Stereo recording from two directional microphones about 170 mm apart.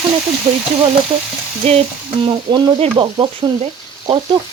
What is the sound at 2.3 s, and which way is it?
Frying, 30° right (ahead or behind).